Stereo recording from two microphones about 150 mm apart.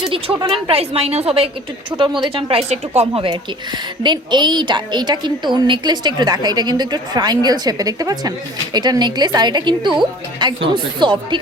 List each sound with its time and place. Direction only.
0.7 s speech: 40° right (ahead or behind)
4.0 s a woman's voice: 30° right (ahead or behind)